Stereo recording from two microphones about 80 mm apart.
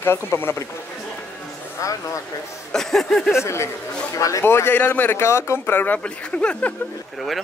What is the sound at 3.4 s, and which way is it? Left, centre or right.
A man's voice, left.